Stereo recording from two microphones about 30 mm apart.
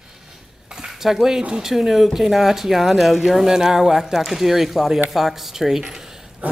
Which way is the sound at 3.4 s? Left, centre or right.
Centre.